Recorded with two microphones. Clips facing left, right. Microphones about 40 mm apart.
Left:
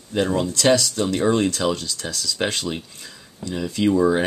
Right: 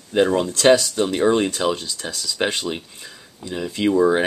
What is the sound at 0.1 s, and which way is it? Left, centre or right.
Speech, centre.